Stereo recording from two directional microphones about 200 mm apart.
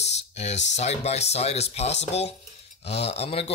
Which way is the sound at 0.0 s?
35° left (ahead or behind).